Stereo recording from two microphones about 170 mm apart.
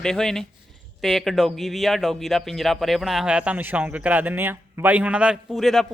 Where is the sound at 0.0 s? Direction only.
5° left (ahead or behind).